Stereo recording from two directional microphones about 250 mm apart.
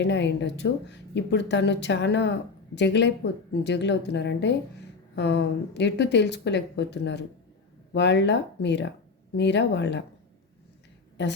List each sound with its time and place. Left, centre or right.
0.0 s a woman's voice: left